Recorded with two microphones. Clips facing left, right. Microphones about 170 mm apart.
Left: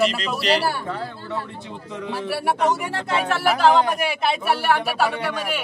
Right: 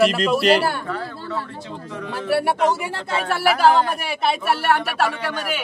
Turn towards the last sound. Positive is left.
turn(degrees=0)  # may be behind; listen again after turning